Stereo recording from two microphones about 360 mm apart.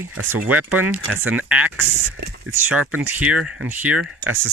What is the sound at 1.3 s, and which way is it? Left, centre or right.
Speech, centre.